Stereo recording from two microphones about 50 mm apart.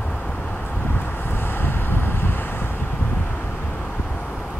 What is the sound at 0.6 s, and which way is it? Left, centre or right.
Wind, left.